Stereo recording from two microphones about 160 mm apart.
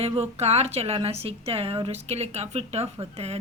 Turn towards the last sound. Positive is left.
turn(degrees=-40)  # may be behind; listen again after turning